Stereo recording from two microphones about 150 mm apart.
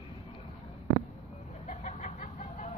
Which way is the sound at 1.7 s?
50° left (ahead or behind).